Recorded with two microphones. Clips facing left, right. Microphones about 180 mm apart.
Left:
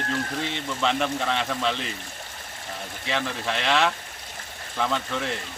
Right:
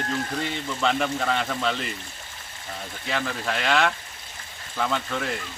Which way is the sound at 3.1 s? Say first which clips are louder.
Even; centre (ahead or behind).